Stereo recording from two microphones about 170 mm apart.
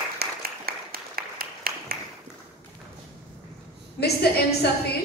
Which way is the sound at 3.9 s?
70° left (ahead or behind).